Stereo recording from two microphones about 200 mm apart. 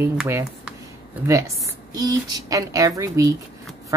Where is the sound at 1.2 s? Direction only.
15° right (ahead or behind).